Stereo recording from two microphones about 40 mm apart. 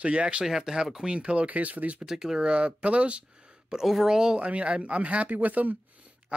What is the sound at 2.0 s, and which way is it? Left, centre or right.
Speech, centre.